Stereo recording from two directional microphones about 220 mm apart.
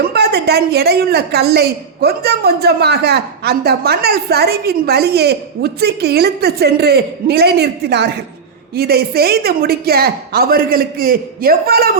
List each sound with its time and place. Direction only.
0.0 s a woman's voice: 45° right (ahead or behind)